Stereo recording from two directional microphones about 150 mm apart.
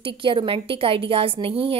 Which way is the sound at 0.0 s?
35° right (ahead or behind).